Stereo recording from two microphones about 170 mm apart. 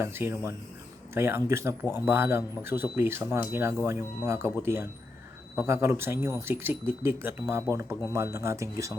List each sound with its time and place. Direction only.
0.0 s speech: 15° right (ahead or behind)